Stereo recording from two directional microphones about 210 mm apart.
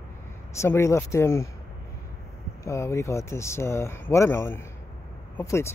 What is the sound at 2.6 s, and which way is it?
Speech, 15° left (ahead or behind).